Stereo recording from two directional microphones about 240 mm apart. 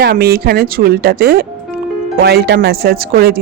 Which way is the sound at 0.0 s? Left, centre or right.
Right.